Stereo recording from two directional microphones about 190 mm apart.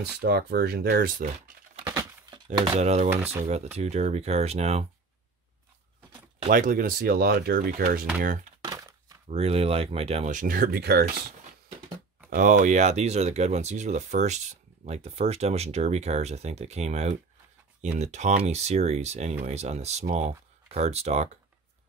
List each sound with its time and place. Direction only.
0.2 s speech: 55° right (ahead or behind)
1.9 s a sound: 20° right (ahead or behind)
2.8 s speech: 35° right (ahead or behind)
6.5 s speech: 45° right (ahead or behind)
8.6 s a sound: 20° right (ahead or behind)
9.3 s speech: 30° right (ahead or behind); by 11.3 s 55° right (ahead or behind)
12.4 s speech: 40° right (ahead or behind)